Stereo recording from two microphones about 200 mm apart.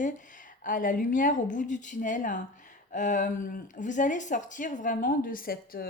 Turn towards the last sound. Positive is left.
turn(degrees=45)  # may be behind; listen again after turning